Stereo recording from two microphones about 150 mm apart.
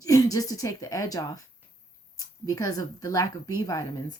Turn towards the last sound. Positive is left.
turn(degrees=25)  # may be behind; listen again after turning